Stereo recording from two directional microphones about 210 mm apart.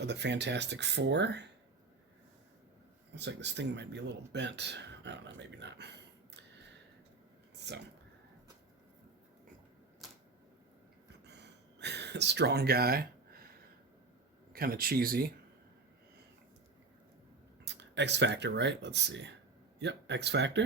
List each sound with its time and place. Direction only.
0.0 s speech: 55° right (ahead or behind)
3.2 s speech: 55° right (ahead or behind)
7.6 s a sound: 55° right (ahead or behind)
10.0 s typewriter: centre (ahead or behind)
11.3 s a sound: 55° right (ahead or behind)
14.5 s speech: 45° right (ahead or behind)
17.7 s speech: 55° right (ahead or behind)